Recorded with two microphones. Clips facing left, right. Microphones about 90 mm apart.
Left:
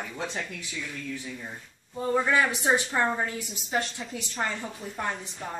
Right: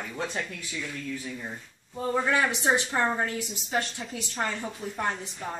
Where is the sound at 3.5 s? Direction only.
Centre (ahead or behind).